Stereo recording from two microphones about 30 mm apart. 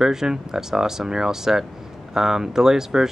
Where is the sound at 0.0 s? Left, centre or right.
Centre.